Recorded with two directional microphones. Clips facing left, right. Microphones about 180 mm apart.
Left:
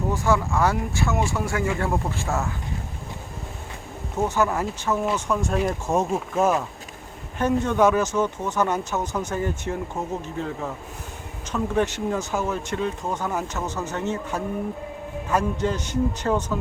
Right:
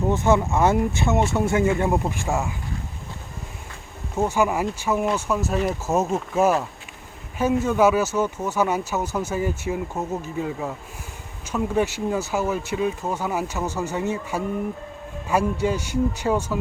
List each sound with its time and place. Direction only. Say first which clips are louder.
0.1 s speech: right 3 dB; 20° right (ahead or behind)
4.2 s speech: right 2 dB; 10° right (ahead or behind)